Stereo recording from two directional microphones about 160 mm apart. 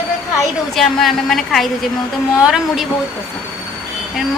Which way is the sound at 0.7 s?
Centre (ahead or behind).